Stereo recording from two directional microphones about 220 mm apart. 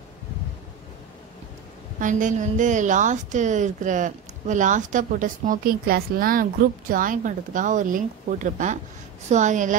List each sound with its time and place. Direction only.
2.0 s a woman's voice: 35° right (ahead or behind)